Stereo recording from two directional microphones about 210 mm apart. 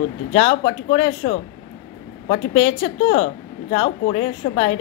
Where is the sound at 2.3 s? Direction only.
55° left (ahead or behind).